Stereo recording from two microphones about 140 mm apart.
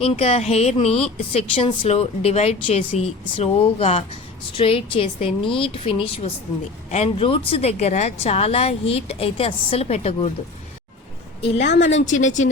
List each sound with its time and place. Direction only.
0.0 s a woman's voice: 45° left (ahead or behind)
11.5 s a woman's voice: 55° left (ahead or behind)